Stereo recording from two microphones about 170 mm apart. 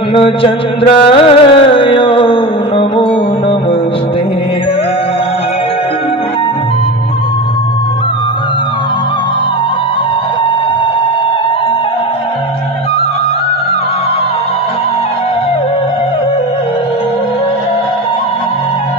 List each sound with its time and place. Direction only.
0.1 s mantra: 30° left (ahead or behind)
1.0 s carnatic music: 30° left (ahead or behind)